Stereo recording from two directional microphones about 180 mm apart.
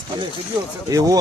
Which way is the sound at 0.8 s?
20° right (ahead or behind).